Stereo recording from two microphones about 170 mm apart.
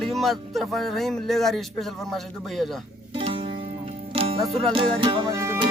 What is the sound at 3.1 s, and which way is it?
Music, 35° right (ahead or behind).